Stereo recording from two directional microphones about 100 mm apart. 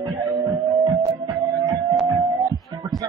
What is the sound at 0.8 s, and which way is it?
Music, 40° right (ahead or behind).